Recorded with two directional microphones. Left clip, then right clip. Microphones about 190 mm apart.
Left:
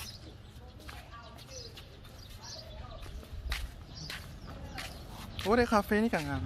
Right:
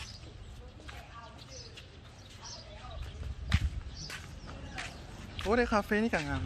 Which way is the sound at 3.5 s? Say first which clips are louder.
Right 2 dB; 15° left (ahead or behind).